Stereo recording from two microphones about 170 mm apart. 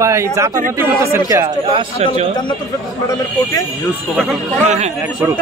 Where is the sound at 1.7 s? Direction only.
35° right (ahead or behind).